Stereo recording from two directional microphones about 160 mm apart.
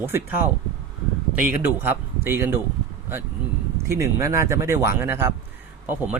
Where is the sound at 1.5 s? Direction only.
15° right (ahead or behind).